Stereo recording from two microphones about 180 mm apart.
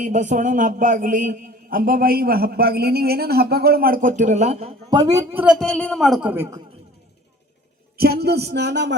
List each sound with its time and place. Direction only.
0.0 s a man's voice: 40° right (ahead or behind)
4.9 s a woman's voice: 20° right (ahead or behind)
5.5 s a man's voice: 5° left (ahead or behind); by 6.6 s 15° right (ahead or behind)
7.9 s speech: 60° right (ahead or behind)